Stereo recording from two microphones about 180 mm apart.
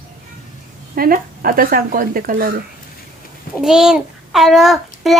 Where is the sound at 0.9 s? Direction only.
50° right (ahead or behind).